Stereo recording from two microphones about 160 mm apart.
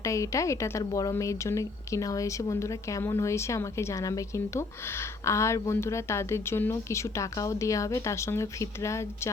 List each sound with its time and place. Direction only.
0.0 s a woman's voice: 20° left (ahead or behind)